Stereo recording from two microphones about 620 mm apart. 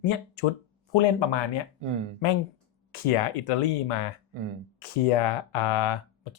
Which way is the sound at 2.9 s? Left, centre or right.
Left.